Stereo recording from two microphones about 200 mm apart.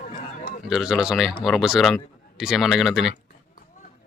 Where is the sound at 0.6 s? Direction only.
Centre (ahead or behind).